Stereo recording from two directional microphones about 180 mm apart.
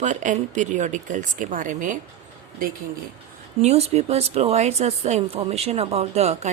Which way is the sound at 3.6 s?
35° right (ahead or behind).